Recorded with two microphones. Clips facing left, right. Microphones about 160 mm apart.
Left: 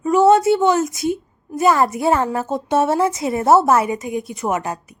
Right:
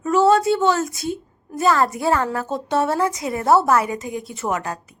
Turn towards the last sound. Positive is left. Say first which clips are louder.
# left 3 dB
turn(degrees=20)  # may be behind; listen again after turning